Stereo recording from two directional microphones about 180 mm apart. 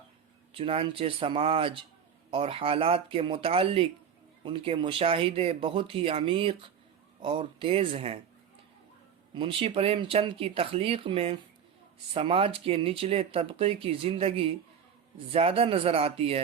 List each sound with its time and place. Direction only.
0.5 s speech: 30° right (ahead or behind)
9.3 s speech: 30° right (ahead or behind)